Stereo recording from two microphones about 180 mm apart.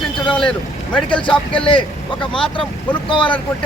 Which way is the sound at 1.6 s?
25° left (ahead or behind).